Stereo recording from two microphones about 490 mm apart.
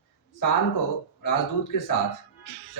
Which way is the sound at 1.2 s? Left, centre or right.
Left.